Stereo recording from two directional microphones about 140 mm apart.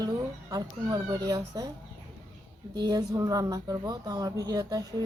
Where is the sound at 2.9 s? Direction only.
25° right (ahead or behind).